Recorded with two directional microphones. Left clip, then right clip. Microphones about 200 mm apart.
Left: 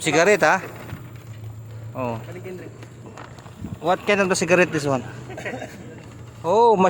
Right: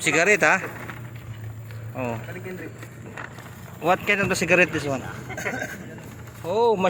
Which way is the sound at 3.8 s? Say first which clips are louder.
Left 1 dB; 10° left (ahead or behind).